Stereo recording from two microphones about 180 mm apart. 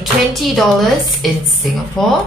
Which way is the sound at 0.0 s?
Centre (ahead or behind).